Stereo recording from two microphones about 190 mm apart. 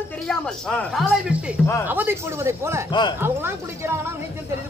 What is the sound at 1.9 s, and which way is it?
Speech, 10° right (ahead or behind).